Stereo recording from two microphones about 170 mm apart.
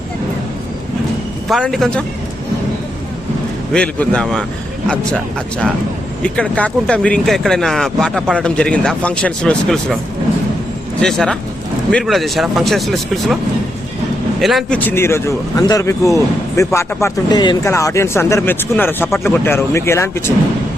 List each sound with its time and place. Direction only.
1.5 s speech: centre (ahead or behind)
3.7 s speech: 5° left (ahead or behind)
11.0 s speech: 5° left (ahead or behind)
14.4 s speech: centre (ahead or behind)
14.8 s speech: 15° left (ahead or behind)